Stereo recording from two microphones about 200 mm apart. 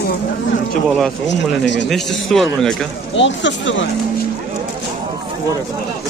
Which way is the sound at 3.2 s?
65° left (ahead or behind).